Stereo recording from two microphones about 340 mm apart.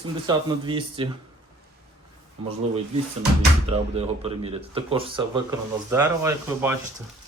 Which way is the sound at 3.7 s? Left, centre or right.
Centre.